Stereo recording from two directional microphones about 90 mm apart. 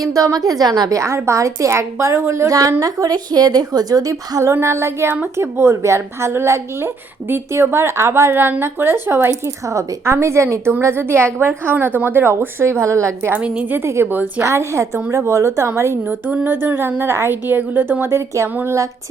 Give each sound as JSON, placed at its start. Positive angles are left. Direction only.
{"t": 0.0, "sound": "a woman's voice", "side_deg": -40}
{"t": 13.4, "sound": "a woman's voice", "side_deg": -15}
{"t": 14.4, "sound": "a woman's voice", "side_deg": -35}